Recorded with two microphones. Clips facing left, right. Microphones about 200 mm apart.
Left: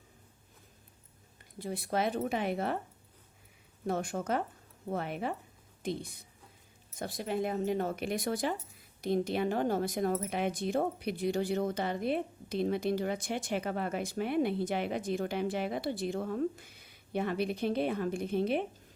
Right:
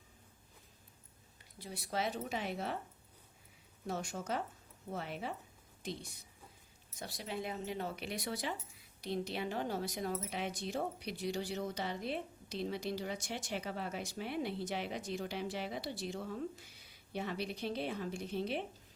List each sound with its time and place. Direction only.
1.5 s speech: 55° left (ahead or behind)
3.8 s a woman's voice: 55° left (ahead or behind)